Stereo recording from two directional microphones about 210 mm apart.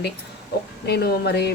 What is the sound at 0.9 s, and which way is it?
Speech, 50° left (ahead or behind).